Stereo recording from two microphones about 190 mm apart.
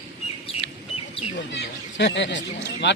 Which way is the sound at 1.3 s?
70° left (ahead or behind).